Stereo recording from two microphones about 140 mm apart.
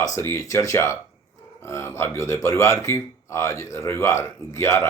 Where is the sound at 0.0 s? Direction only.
20° left (ahead or behind).